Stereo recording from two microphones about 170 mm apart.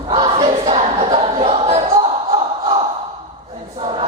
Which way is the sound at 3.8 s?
35° right (ahead or behind).